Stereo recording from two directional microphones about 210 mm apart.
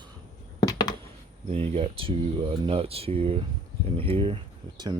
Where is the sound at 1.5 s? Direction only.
30° right (ahead or behind).